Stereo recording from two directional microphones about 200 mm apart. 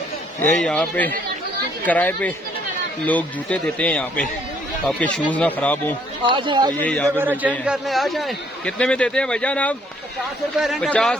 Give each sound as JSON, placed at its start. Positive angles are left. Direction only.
{"t": 0.4, "sound": "a man's voice", "side_deg": 5}
{"t": 6.2, "sound": "speech", "side_deg": -25}
{"t": 6.8, "sound": "speech", "side_deg": 5}
{"t": 7.2, "sound": "a man's voice", "side_deg": -10}